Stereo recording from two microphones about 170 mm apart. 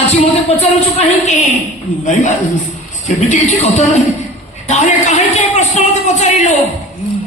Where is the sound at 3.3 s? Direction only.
40° left (ahead or behind).